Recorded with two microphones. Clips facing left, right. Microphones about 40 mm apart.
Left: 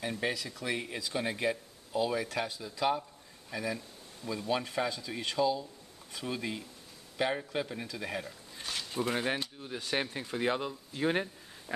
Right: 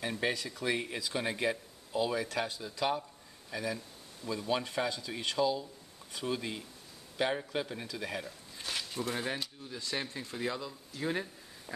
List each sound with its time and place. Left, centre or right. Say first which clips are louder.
0.0 s speech: even; centre
2.8 s a sound: left 2 dB; centre
4.3 s speech: even; centre
8.9 s speech: left 5 dB; left